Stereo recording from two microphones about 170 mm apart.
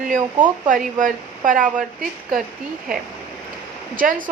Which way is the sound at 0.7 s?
50° right (ahead or behind).